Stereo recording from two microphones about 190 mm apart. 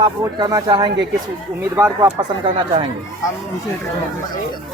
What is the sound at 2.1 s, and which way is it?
Speech, 25° right (ahead or behind).